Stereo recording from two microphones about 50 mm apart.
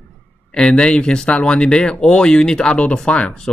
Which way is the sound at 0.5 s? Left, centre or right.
Centre.